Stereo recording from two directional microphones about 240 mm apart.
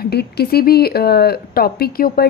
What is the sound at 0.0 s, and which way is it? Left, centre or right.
Speech, left.